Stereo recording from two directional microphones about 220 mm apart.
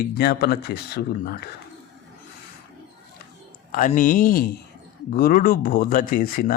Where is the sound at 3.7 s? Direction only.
40° left (ahead or behind).